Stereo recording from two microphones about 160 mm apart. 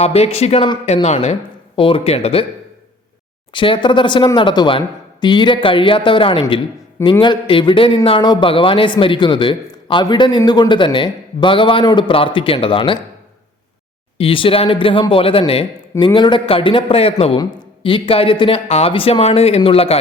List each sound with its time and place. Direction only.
0.0 s a man's voice: 40° left (ahead or behind)
1.0 s a man's voice: 45° left (ahead or behind)
3.5 s a man's voice: 30° left (ahead or behind)
14.2 s a man's voice: 35° left (ahead or behind)